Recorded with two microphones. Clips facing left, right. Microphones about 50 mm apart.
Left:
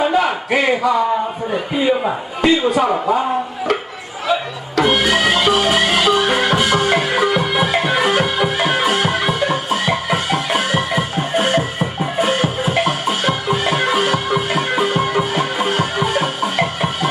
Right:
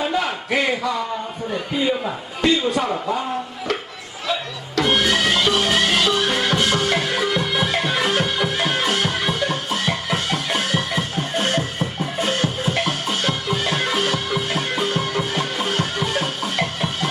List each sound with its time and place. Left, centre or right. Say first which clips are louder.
0.0 s a sound: left 6 dB; centre
0.5 s a man's voice: left 5 dB; centre
2.9 s a man's voice: left 6 dB; left
4.3 s music: left 6 dB; centre